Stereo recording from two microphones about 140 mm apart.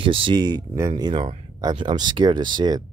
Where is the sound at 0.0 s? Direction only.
40° right (ahead or behind).